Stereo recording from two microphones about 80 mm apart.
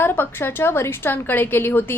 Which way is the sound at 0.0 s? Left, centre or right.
Left.